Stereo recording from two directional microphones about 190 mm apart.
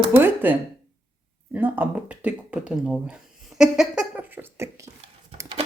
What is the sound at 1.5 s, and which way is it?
Speech, 10° right (ahead or behind).